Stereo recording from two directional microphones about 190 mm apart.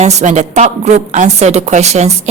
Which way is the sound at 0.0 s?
40° right (ahead or behind).